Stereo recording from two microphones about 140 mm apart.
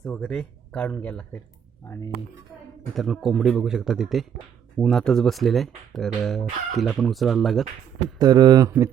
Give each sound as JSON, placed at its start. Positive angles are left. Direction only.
{"t": 0.0, "sound": "speech", "side_deg": 10}
{"t": 2.9, "sound": "speech", "side_deg": 0}
{"t": 8.2, "sound": "speech", "side_deg": -30}